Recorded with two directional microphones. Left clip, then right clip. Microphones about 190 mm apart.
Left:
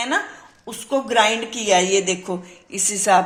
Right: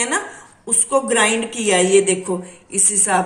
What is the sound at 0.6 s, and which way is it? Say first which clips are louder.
Speech: right 5 dB; 45° left (ahead or behind).